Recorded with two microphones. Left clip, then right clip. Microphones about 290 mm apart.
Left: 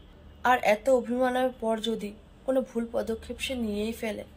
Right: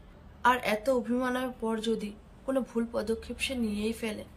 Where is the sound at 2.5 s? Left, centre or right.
Right.